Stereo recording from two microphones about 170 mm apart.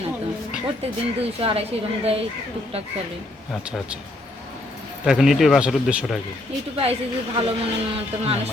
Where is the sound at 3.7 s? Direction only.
5° right (ahead or behind).